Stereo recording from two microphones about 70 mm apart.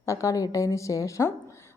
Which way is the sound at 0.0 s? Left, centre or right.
Left.